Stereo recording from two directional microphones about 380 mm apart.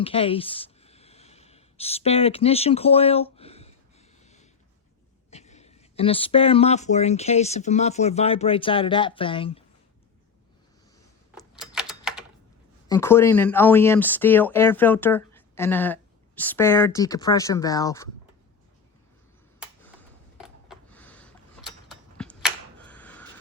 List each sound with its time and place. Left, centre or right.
0.0 s speech: centre
4.2 s snort: centre
5.3 s speech: centre
11.6 s typewriter: centre
12.9 s speech: centre
20.4 s a sound: centre